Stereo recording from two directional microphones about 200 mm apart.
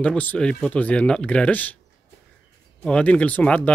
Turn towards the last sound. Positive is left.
turn(degrees=5)  # may be behind; listen again after turning